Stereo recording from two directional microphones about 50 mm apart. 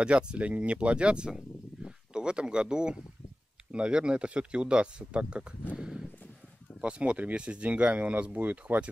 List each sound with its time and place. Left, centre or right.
0.0 s speech: right
5.8 s clip-clop: centre
6.8 s speech: right